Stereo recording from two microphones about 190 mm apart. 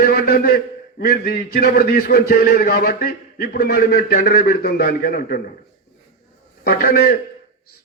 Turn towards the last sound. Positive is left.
turn(degrees=55)  # may be behind; listen again after turning